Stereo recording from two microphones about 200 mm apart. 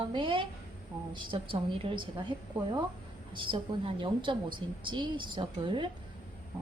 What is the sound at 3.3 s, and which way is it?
A woman's voice, 25° right (ahead or behind).